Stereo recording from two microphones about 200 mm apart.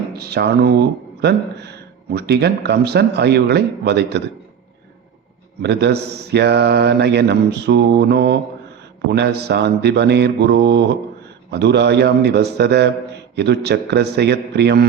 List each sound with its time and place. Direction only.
0.2 s speech: 55° right (ahead or behind)
5.6 s speech: 55° right (ahead or behind)